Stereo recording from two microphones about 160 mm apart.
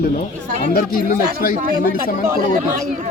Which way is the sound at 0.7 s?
65° left (ahead or behind).